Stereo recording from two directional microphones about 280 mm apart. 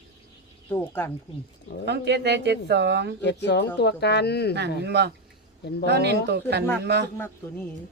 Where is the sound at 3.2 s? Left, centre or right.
Left.